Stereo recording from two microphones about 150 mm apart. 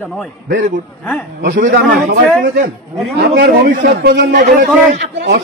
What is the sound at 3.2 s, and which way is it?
A man's voice, 80° right.